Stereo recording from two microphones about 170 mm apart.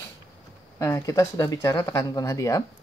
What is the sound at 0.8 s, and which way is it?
Speech, 15° left (ahead or behind).